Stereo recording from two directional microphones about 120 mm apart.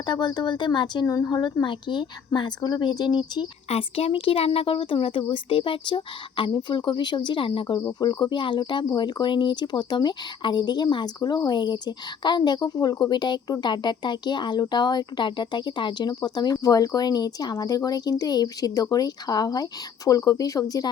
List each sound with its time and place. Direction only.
0.0 s speech: 40° left (ahead or behind)
3.7 s speech: 55° left (ahead or behind)
7.8 s speech: 30° left (ahead or behind)